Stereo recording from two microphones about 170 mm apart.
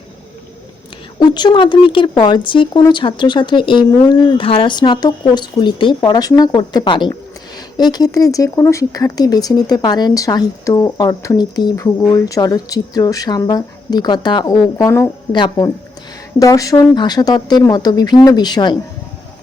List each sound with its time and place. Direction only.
1.2 s speech: 25° left (ahead or behind)